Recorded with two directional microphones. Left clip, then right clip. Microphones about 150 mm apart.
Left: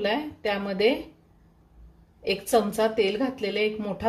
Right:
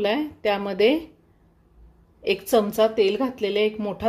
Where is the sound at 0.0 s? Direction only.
60° right (ahead or behind).